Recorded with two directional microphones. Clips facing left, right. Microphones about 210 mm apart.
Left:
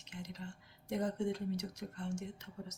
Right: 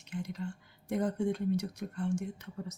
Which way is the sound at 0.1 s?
55° right (ahead or behind).